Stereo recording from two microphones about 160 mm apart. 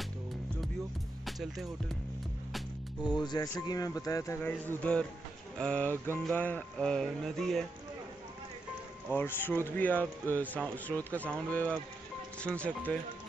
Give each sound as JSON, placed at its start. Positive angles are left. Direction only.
{"t": 1.2, "sound": "music", "side_deg": 0}
{"t": 3.0, "sound": "speech", "side_deg": 30}
{"t": 6.3, "sound": "music", "side_deg": 10}
{"t": 9.1, "sound": "speech", "side_deg": 10}